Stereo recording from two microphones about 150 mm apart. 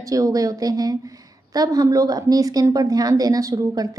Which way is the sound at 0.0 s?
25° right (ahead or behind).